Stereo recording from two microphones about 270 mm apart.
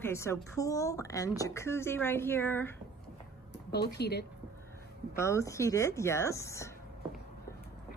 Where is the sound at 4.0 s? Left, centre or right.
Left.